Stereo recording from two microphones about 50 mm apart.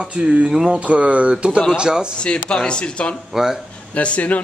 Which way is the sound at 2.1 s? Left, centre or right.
Centre.